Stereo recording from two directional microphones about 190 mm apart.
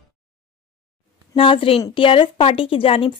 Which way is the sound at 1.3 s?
30° left (ahead or behind).